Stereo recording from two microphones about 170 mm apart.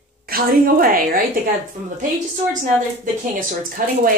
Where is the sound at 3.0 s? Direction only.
55° right (ahead or behind).